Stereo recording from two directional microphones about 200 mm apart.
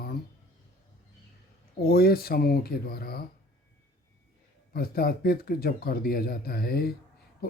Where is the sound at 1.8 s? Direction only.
50° left (ahead or behind).